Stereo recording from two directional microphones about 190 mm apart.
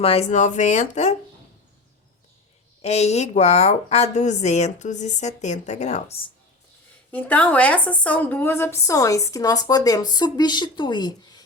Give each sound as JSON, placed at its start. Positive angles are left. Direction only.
{"t": 0.0, "sound": "a woman's voice", "side_deg": 30}
{"t": 2.8, "sound": "a woman's voice", "side_deg": 35}
{"t": 7.1, "sound": "a woman's voice", "side_deg": 10}